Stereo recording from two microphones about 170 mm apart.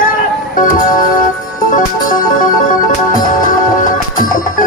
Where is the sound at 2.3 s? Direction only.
50° left (ahead or behind).